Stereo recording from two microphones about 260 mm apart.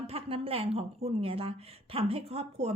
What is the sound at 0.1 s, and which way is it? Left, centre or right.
Speech, right.